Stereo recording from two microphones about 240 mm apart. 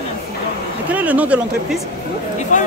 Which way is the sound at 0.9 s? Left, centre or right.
Centre.